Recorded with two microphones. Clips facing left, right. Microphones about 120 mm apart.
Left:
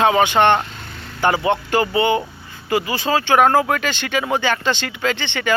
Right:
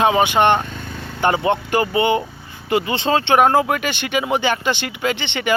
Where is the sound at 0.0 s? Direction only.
20° right (ahead or behind).